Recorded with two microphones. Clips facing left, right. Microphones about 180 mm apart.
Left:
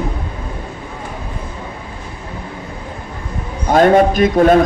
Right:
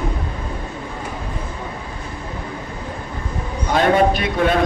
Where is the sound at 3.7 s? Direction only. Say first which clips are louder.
Left 5 dB; 45° left (ahead or behind).